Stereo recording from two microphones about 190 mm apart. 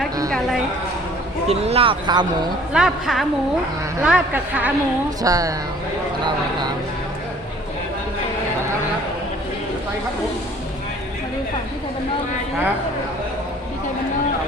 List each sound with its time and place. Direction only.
0.3 s a sound: 5° left (ahead or behind)
1.5 s speech: 30° right (ahead or behind)
2.7 s a woman's voice: centre (ahead or behind)
5.2 s speech: 20° right (ahead or behind)